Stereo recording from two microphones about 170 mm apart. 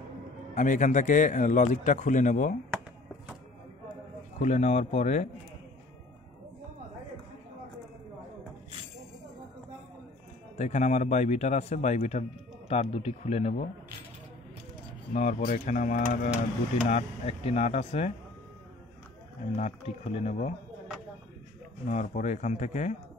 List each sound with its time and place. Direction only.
0.6 s a man's voice: 45° left (ahead or behind)
4.4 s speech: 45° left (ahead or behind)
10.6 s a man's voice: 45° left (ahead or behind)
15.1 s a man's voice: 45° left (ahead or behind)
16.9 s speech: 35° left (ahead or behind)
19.5 s speech: 40° left (ahead or behind)
21.8 s a man's voice: 45° left (ahead or behind)